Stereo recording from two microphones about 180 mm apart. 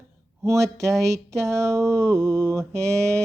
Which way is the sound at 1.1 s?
15° right (ahead or behind).